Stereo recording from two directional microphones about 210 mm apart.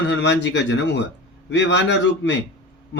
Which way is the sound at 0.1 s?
55° left (ahead or behind).